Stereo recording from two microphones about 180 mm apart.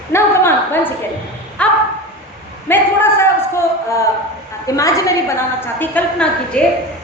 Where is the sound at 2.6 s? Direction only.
10° left (ahead or behind).